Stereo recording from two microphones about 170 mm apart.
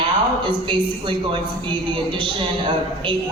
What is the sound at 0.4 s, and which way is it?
A man's voice, 30° right (ahead or behind).